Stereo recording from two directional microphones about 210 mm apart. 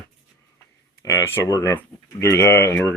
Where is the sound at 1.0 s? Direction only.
15° left (ahead or behind).